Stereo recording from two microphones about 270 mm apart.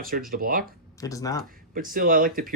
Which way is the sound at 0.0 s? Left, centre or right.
Right.